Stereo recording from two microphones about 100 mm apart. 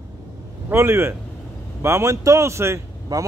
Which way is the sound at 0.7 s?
25° right (ahead or behind).